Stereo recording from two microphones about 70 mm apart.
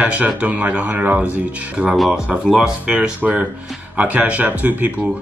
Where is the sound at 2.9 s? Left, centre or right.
Centre.